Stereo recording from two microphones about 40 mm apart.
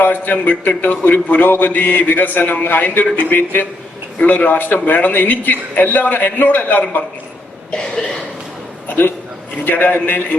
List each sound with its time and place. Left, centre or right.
0.0 s a man's voice: left
7.7 s cough: left
8.9 s a man's voice: left